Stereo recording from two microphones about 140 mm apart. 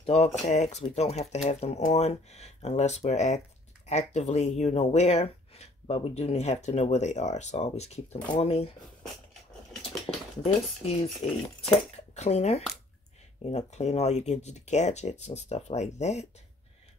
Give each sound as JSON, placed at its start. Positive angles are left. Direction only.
{"t": 0.0, "sound": "speech", "side_deg": 50}
{"t": 10.4, "sound": "speech", "side_deg": 45}
{"t": 12.2, "sound": "speech", "side_deg": 50}